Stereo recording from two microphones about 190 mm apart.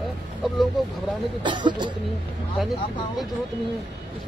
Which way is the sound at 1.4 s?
25° right (ahead or behind).